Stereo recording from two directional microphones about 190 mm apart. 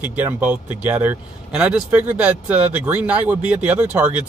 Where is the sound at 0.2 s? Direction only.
10° right (ahead or behind).